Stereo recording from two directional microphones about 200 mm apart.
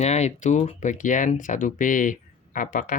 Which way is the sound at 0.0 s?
35° left (ahead or behind).